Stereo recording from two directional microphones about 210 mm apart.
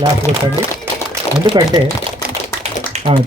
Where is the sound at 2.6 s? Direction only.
30° right (ahead or behind).